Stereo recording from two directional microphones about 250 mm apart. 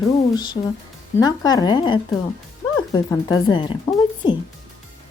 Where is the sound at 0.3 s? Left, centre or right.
Centre.